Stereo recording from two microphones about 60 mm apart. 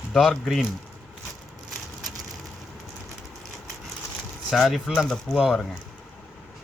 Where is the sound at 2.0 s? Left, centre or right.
Right.